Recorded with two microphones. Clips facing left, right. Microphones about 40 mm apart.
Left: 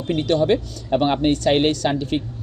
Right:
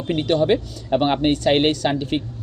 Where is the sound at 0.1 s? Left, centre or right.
Right.